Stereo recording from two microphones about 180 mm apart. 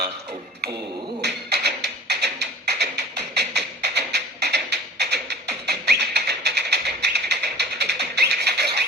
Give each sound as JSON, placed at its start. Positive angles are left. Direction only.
{"t": 1.2, "sound": "music", "side_deg": -65}